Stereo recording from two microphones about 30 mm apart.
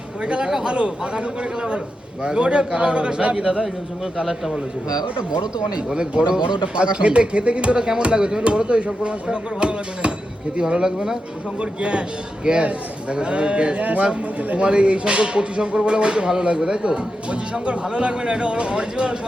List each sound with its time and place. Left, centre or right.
0.2 s speech: right
2.2 s speech: right
3.3 s a man's voice: right
4.2 s a man's voice: centre
5.3 s a man's voice: right
10.8 s a man's voice: centre
11.6 s speech: right